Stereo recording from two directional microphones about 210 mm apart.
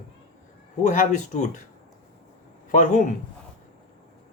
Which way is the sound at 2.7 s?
35° left (ahead or behind).